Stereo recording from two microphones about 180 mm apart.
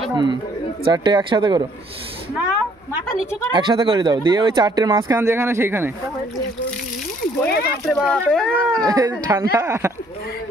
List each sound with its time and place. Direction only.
0.1 s speech: 25° right (ahead or behind)
3.5 s speech: 25° right (ahead or behind)
7.4 s speech: 60° left (ahead or behind)
7.8 s speech: centre (ahead or behind)
8.8 s speech: 20° right (ahead or behind)